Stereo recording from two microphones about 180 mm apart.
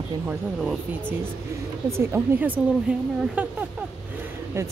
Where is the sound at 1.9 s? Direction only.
10° right (ahead or behind).